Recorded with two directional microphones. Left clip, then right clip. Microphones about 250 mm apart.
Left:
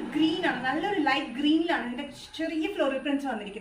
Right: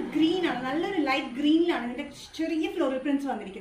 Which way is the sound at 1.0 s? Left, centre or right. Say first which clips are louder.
Even; centre.